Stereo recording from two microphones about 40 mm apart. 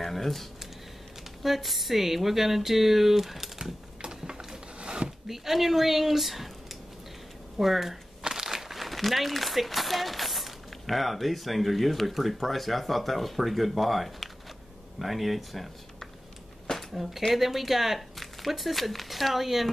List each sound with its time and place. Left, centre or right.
0.0 s speech: centre
4.0 s a sound: centre
5.3 s speech: centre